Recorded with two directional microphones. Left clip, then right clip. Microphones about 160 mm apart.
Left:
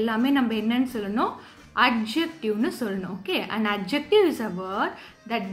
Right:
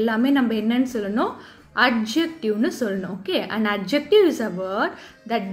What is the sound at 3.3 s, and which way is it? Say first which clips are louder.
Speech: right 3 dB; 35° left (ahead or behind).